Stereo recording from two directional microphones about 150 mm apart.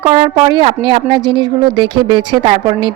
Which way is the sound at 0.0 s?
35° right (ahead or behind).